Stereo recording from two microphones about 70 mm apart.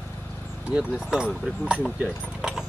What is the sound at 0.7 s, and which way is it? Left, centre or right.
Speech, centre.